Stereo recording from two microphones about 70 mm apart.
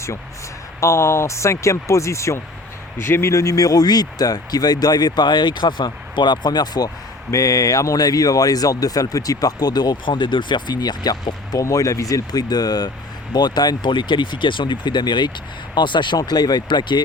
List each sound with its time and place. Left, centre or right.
0.8 s speech: left
7.3 s speech: left
11.6 s speech: left
13.3 s speech: left